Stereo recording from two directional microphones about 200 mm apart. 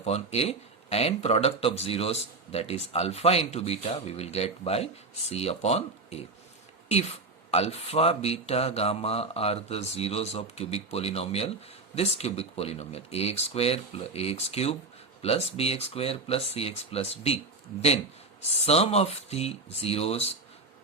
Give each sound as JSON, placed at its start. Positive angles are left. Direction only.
{"t": 0.0, "sound": "speech", "side_deg": 30}
{"t": 7.5, "sound": "speech", "side_deg": 30}
{"t": 18.6, "sound": "speech", "side_deg": 30}